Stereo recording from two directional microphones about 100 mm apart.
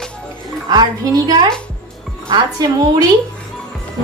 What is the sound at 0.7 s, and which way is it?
A woman's voice, 45° right (ahead or behind).